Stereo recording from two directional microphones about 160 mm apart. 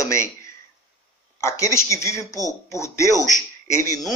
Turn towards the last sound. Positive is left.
turn(degrees=20)  # may be behind; listen again after turning